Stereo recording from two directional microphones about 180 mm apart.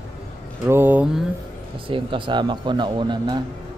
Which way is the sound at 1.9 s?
30° right (ahead or behind).